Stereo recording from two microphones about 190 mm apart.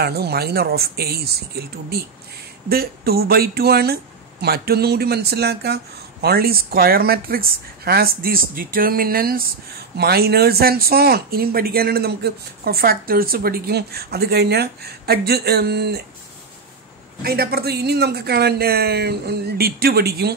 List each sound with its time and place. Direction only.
0.0 s speech: 55° right (ahead or behind)
2.7 s speech: 55° right (ahead or behind)
17.2 s speech: 55° right (ahead or behind)